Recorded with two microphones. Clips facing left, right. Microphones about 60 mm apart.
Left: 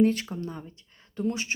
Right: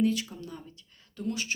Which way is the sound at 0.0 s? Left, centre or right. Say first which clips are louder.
Left 4 dB; left.